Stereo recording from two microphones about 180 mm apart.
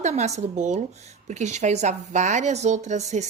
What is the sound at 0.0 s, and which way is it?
A woman's voice, 40° right (ahead or behind).